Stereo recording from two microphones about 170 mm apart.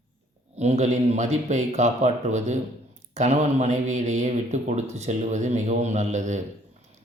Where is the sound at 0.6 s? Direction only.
40° right (ahead or behind).